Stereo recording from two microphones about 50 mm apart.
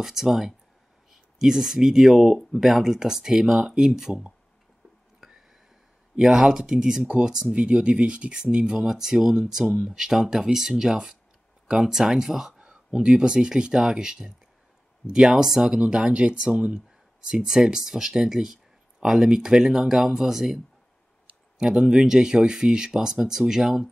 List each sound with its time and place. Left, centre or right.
0.0 s speech: centre
5.2 s a sound: centre
6.1 s speech: centre